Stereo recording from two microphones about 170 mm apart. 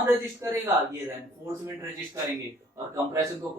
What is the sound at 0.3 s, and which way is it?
Speech, 20° right (ahead or behind).